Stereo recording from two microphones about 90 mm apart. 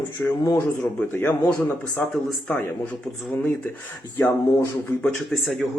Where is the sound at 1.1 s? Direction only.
25° left (ahead or behind).